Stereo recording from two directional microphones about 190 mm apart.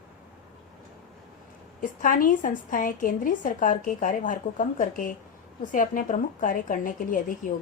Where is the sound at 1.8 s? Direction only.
45° left (ahead or behind).